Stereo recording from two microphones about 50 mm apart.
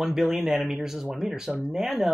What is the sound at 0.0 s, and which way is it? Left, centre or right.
Speech, centre.